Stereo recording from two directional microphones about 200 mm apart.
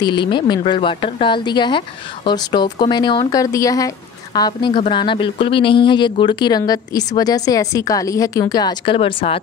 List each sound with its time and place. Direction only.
0.0 s speech: 25° left (ahead or behind)